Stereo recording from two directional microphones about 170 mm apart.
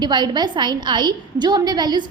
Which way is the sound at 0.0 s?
25° right (ahead or behind).